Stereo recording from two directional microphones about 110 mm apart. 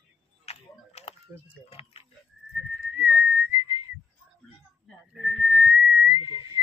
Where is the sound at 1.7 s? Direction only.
60° left (ahead or behind).